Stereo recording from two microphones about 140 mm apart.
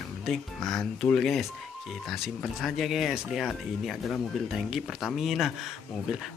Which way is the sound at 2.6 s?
Centre (ahead or behind).